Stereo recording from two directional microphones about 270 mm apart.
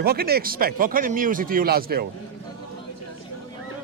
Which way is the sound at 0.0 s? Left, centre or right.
Right.